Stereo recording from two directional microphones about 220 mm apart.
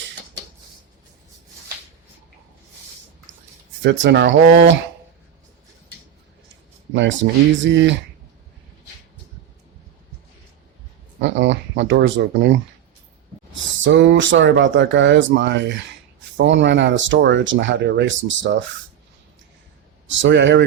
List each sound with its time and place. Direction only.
3.3 s a sound: 60° right (ahead or behind)
4.0 s speech: 55° right (ahead or behind)
6.9 s speech: 55° right (ahead or behind)
11.2 s speech: 55° right (ahead or behind)
20.1 s a man's voice: 55° right (ahead or behind)